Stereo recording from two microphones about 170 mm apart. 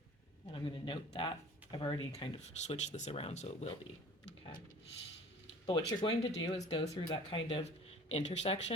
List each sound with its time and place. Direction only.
0.5 s speech: 30° left (ahead or behind)
2.6 s speech: 45° left (ahead or behind)
5.6 s speech: 30° left (ahead or behind)